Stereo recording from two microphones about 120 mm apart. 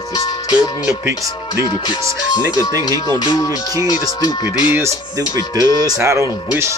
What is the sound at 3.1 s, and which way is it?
Speech, 35° left (ahead or behind).